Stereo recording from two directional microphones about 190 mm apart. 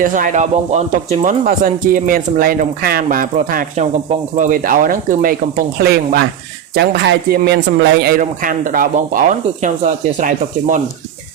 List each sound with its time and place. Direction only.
0.0 s a man's voice: 45° right (ahead or behind)